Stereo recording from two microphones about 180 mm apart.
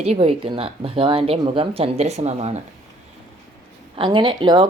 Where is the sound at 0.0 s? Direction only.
35° right (ahead or behind).